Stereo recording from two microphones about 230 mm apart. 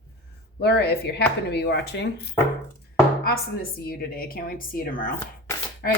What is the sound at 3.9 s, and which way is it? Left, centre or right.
Speech, left.